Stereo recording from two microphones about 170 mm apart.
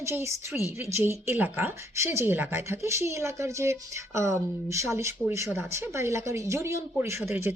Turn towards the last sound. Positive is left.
turn(degrees=-15)  # may be behind; listen again after turning